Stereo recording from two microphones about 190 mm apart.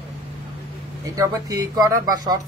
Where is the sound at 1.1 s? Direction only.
20° right (ahead or behind).